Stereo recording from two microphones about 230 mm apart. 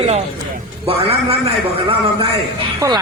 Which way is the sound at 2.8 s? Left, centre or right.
Centre.